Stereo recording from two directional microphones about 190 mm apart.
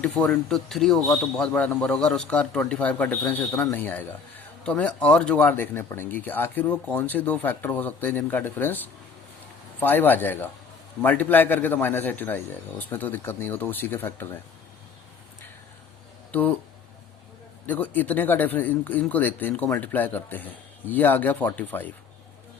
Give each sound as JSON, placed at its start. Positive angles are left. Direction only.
{"t": 0.0, "sound": "speech", "side_deg": 5}
{"t": 1.0, "sound": "a man's voice", "side_deg": 20}
{"t": 1.4, "sound": "a man's voice", "side_deg": 5}
{"t": 16.3, "sound": "speech", "side_deg": 10}
{"t": 17.7, "sound": "a man's voice", "side_deg": 10}